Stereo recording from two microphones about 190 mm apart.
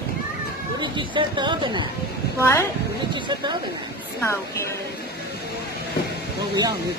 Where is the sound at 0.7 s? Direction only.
25° right (ahead or behind).